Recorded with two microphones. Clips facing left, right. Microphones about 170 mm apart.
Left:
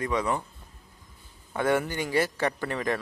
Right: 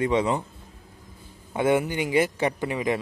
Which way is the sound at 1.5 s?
20° right (ahead or behind).